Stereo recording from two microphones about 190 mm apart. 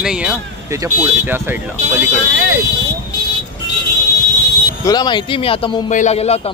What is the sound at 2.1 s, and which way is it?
Speech, 85° right.